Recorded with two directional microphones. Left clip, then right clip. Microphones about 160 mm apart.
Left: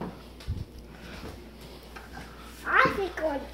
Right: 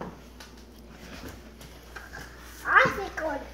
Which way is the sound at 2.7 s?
30° left (ahead or behind).